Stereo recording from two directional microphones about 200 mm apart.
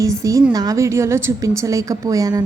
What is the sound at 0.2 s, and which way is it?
A woman's voice, 15° right (ahead or behind).